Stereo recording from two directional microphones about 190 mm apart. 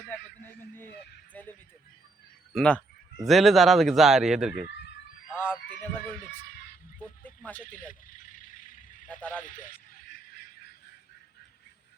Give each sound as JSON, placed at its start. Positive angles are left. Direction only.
{"t": 0.6, "sound": "a sound", "side_deg": 10}
{"t": 2.5, "sound": "speech", "side_deg": 5}
{"t": 5.3, "sound": "a sound", "side_deg": 10}
{"t": 7.0, "sound": "neigh", "side_deg": 10}
{"t": 7.6, "sound": "vehicle", "side_deg": 45}
{"t": 9.4, "sound": "speech", "side_deg": 45}